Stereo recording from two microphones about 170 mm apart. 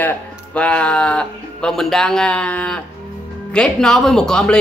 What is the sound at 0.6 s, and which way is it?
A woman's voice, 5° left (ahead or behind).